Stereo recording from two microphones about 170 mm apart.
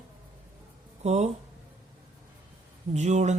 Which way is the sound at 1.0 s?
40° right (ahead or behind).